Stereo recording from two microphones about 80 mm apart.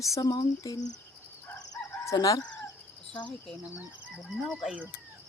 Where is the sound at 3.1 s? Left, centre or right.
Centre.